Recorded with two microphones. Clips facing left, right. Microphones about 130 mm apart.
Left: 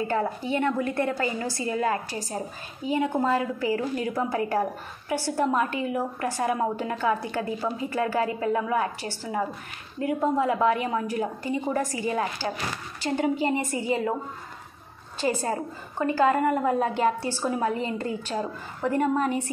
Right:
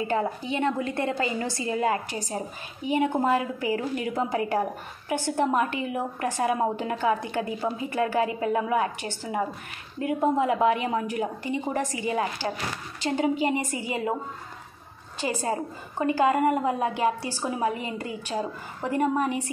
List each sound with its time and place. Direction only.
0.1 s a woman's voice: 15° right (ahead or behind)
3.7 s a woman's voice: 35° left (ahead or behind)
4.1 s a woman's voice: 20° right (ahead or behind)
15.1 s a woman's voice: 15° right (ahead or behind)